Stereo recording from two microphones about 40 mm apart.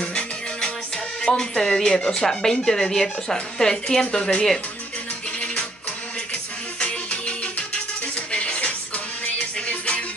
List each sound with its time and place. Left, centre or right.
0.0 s music: left
1.2 s a woman's voice: centre
4.0 s speech: left
6.8 s music: left